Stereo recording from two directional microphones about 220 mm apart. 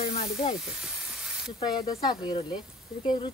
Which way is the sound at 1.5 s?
20° left (ahead or behind).